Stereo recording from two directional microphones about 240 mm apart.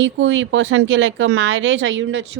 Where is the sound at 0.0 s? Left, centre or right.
Right.